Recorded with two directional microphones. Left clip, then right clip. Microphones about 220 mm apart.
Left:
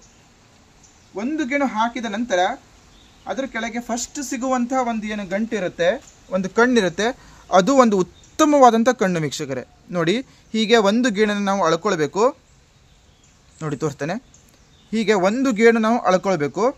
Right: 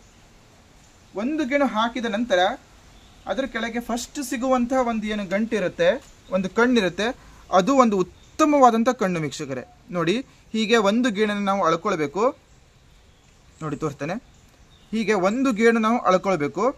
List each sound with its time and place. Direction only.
1.1 s speech: 5° left (ahead or behind)
6.4 s speech: 25° left (ahead or behind)
13.6 s speech: 30° left (ahead or behind)